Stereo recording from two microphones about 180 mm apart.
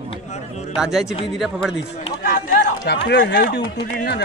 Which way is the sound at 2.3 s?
60° left (ahead or behind).